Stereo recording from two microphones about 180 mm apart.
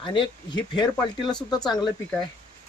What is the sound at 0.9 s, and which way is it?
Speech, 5° left (ahead or behind).